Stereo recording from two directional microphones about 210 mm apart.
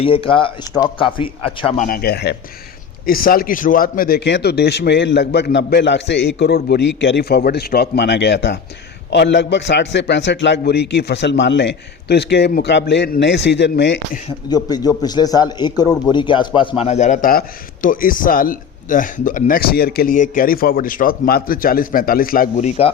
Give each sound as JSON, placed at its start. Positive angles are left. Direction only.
{"t": 0.0, "sound": "a man's voice", "side_deg": 25}
{"t": 14.5, "sound": "a man's voice", "side_deg": 20}